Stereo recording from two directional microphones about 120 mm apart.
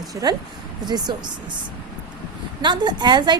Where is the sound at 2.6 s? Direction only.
40° right (ahead or behind).